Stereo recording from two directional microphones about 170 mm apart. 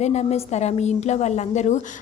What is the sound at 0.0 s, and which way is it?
A woman's voice, 40° left (ahead or behind).